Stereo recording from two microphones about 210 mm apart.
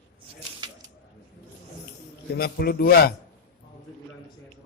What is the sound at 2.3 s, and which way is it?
Speech, 50° left (ahead or behind).